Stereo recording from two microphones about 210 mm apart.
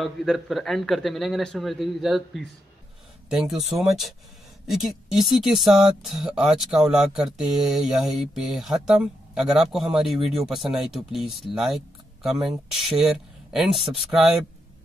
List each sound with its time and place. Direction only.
0.0 s speech: centre (ahead or behind)